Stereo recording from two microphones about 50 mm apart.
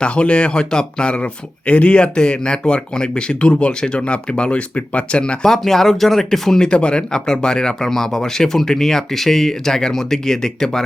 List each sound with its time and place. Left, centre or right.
0.0 s speech: left; by 6.7 s centre
6.7 s speech: centre